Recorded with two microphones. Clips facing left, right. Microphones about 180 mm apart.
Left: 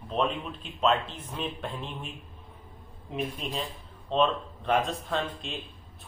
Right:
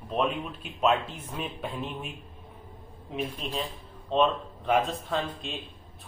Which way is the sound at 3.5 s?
Centre (ahead or behind).